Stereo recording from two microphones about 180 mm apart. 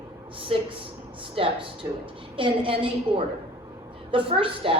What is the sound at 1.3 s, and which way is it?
A woman's voice, 30° right (ahead or behind).